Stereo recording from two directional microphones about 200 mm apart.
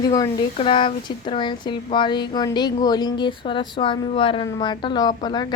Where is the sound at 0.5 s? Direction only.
25° left (ahead or behind).